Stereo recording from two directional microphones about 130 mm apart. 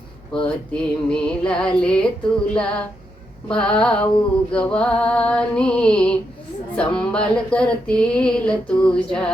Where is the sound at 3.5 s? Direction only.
5° left (ahead or behind).